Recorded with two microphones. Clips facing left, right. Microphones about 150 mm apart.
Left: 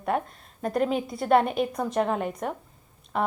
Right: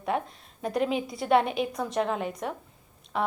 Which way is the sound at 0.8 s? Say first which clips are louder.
Left 2 dB; 45° left (ahead or behind).